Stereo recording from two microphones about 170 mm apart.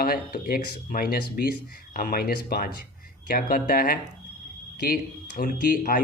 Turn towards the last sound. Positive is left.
turn(degrees=55)  # may be behind; listen again after turning